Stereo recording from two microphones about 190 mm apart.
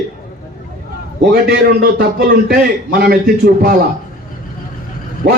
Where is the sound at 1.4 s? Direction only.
55° right (ahead or behind).